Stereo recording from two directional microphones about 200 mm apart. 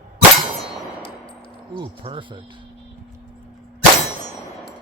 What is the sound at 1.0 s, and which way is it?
Clang, 25° left (ahead or behind).